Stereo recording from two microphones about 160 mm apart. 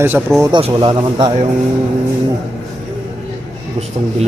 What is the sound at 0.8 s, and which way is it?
Speech, 35° right (ahead or behind).